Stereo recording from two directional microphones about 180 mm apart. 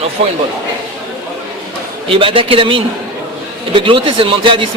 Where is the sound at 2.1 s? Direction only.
30° right (ahead or behind).